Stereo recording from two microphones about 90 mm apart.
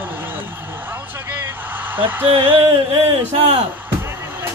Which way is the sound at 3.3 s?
90° right.